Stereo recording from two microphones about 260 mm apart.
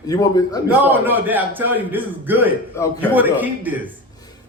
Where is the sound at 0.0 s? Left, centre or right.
Centre.